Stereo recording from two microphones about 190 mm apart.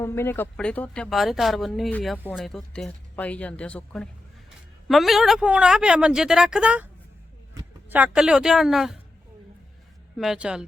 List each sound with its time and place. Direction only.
0.0 s speech: 15° left (ahead or behind); by 9.0 s centre (ahead or behind)
10.2 s speech: 5° right (ahead or behind)